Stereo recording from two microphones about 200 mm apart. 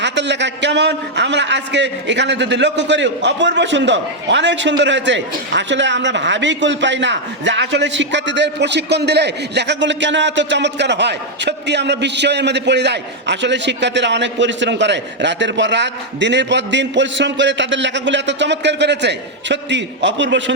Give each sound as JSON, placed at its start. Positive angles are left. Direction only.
{"t": 0.0, "sound": "a man's voice", "side_deg": -60}